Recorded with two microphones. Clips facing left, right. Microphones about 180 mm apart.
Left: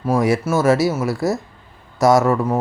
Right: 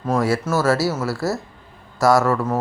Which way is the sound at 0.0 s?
15° left (ahead or behind).